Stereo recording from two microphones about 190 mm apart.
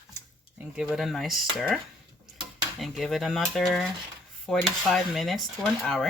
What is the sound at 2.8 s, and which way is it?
Speech, centre (ahead or behind).